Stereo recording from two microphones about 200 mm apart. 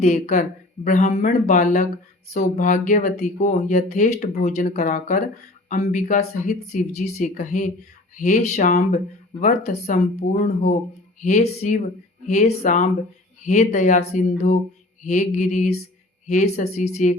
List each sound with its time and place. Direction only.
0.0 s speech: 35° left (ahead or behind)